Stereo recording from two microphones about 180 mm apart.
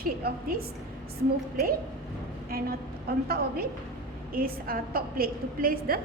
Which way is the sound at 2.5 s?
55° right (ahead or behind).